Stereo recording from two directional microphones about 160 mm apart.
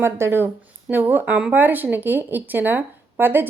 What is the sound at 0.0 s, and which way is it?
Speech, 15° right (ahead or behind).